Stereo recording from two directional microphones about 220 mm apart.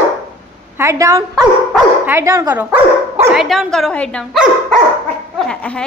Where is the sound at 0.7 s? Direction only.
15° right (ahead or behind).